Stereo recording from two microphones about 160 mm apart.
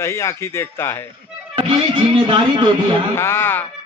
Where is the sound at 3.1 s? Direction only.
15° left (ahead or behind).